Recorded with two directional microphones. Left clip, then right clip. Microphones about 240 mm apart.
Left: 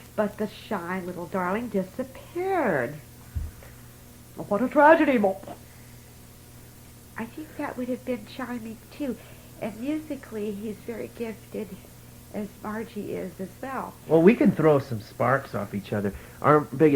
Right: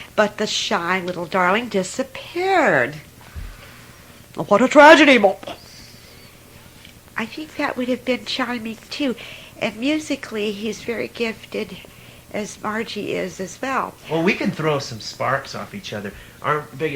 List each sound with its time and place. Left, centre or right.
0.2 s a woman's voice: right
4.4 s speech: right
7.2 s a woman's voice: right
14.1 s speech: centre
16.4 s speech: left